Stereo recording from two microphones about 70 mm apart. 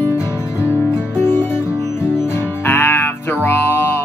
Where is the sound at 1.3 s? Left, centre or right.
Left.